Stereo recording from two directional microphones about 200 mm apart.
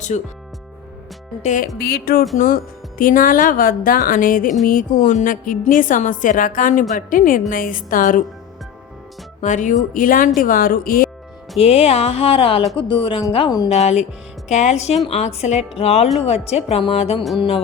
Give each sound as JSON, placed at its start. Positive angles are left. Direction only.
{"t": 0.1, "sound": "speech", "side_deg": 35}
{"t": 1.4, "sound": "speech", "side_deg": 35}
{"t": 1.8, "sound": "a woman's voice", "side_deg": 50}
{"t": 9.4, "sound": "a woman's voice", "side_deg": 40}
{"t": 11.5, "sound": "speech", "side_deg": 30}
{"t": 13.7, "sound": "speech", "side_deg": 30}